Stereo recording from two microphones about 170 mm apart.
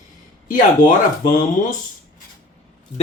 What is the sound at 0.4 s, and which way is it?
Speech, 50° left (ahead or behind).